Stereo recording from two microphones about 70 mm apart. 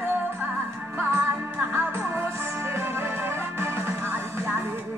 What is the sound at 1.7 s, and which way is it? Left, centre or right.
Music, right.